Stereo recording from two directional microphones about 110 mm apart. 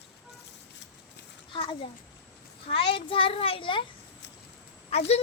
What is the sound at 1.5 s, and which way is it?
A child's voice, 55° left (ahead or behind).